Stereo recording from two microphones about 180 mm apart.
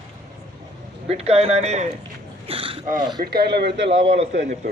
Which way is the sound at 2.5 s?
30° right (ahead or behind).